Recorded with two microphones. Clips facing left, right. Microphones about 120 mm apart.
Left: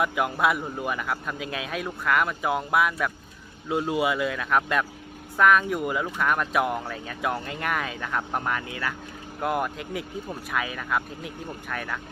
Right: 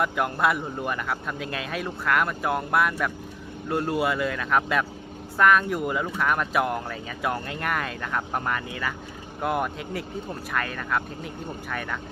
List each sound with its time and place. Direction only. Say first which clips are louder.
0.0 s speech: even; centre (ahead or behind)